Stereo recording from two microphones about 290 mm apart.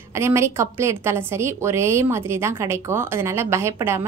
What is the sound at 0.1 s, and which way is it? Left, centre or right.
A woman's voice, centre.